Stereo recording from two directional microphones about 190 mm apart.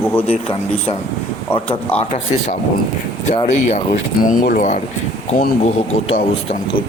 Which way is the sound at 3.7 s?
40° left (ahead or behind).